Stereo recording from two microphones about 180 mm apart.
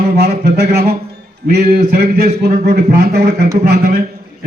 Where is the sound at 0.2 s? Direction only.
60° right (ahead or behind).